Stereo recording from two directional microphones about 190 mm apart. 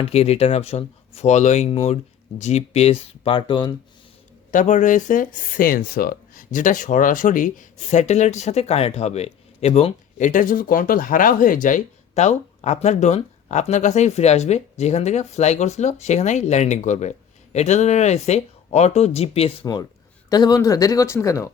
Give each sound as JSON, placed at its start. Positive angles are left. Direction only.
{"t": 0.0, "sound": "speech", "side_deg": 30}
{"t": 4.5, "sound": "speech", "side_deg": 40}
{"t": 20.3, "sound": "speech", "side_deg": 20}